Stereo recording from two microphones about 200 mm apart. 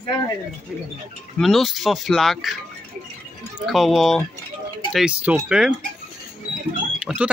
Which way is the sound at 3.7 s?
Centre (ahead or behind).